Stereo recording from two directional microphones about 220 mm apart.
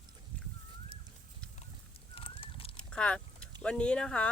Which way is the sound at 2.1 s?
25° left (ahead or behind).